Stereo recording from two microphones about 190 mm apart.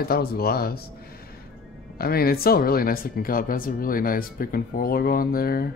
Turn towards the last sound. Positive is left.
turn(degrees=50)  # may be behind; listen again after turning